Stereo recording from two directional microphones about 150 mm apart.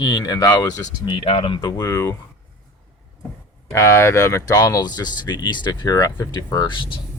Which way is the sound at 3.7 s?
20° left (ahead or behind).